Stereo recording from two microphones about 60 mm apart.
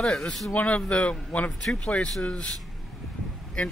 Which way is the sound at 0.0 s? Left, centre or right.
Centre.